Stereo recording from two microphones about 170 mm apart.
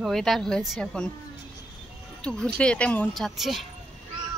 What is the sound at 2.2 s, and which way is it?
Speech, 5° left (ahead or behind).